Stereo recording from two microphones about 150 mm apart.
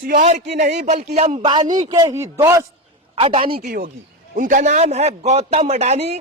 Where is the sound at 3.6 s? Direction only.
80° right.